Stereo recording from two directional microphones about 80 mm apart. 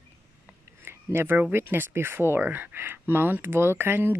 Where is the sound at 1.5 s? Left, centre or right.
Right.